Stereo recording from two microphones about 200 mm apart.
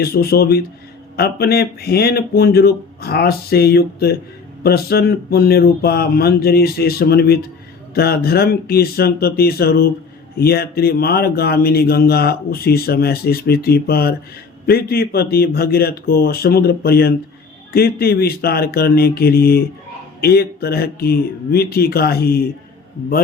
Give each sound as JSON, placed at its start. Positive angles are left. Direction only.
{"t": 0.0, "sound": "speech", "side_deg": 50}